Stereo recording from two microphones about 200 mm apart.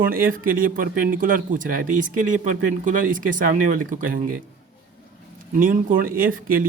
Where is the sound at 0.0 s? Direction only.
45° right (ahead or behind).